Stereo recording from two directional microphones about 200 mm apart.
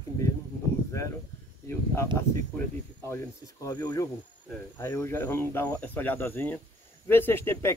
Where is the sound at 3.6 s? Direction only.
20° left (ahead or behind).